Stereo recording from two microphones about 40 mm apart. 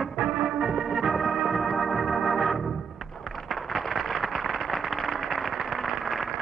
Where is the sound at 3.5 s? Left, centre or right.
Centre.